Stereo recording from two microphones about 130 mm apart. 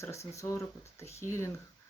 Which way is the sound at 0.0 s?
20° left (ahead or behind).